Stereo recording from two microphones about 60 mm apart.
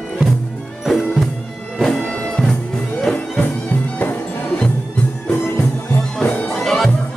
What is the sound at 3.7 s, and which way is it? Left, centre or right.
Music, left.